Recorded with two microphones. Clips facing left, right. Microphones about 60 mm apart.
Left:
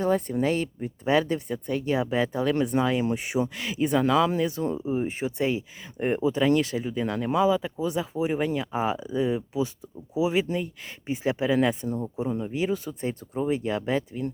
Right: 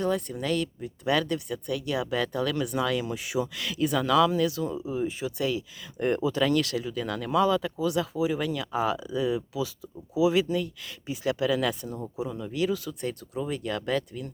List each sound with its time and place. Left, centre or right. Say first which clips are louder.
0.0 s speech: left 4 dB; left
2.5 s speech: left 4 dB; left
7.4 s speech: left 3 dB; centre
7.8 s speech: right 1 dB; left
12.2 s speech: even; left